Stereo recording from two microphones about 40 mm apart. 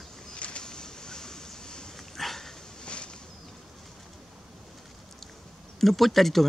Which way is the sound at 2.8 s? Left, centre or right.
Left.